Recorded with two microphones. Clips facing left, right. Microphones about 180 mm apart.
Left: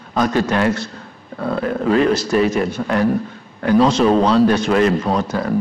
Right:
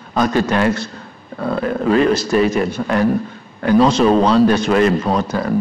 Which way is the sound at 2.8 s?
20° right (ahead or behind).